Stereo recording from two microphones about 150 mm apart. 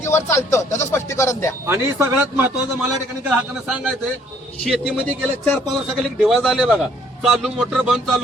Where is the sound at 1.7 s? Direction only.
15° right (ahead or behind).